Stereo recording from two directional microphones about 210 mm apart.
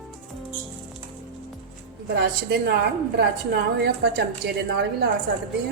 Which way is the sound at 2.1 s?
50° right (ahead or behind).